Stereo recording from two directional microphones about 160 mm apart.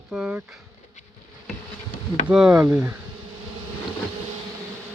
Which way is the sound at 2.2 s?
5° right (ahead or behind).